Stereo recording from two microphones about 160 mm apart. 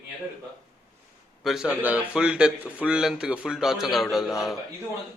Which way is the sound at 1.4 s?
5° right (ahead or behind).